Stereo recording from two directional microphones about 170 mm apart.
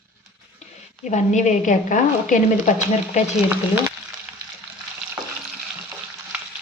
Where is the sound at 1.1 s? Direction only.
45° left (ahead or behind).